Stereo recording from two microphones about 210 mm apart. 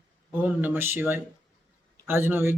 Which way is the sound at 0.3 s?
10° right (ahead or behind).